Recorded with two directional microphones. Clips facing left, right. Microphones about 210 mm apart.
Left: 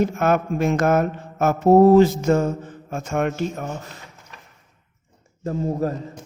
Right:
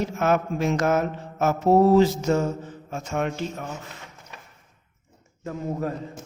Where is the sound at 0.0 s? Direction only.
55° left (ahead or behind).